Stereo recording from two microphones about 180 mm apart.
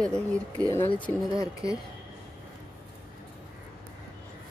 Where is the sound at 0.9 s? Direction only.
25° left (ahead or behind).